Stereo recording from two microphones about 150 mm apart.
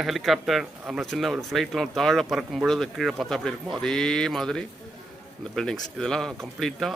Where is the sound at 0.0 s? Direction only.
Centre (ahead or behind).